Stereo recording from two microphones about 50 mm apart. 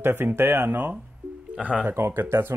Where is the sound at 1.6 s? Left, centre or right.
Right.